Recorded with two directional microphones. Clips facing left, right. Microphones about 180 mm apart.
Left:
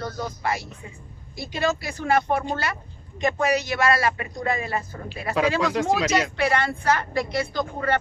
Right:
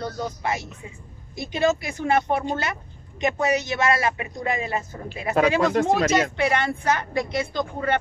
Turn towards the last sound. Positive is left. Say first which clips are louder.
# even
turn(degrees=-20)  # may be behind; listen again after turning